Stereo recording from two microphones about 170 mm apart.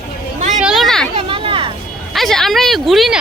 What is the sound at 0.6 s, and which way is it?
Children playing, centre (ahead or behind).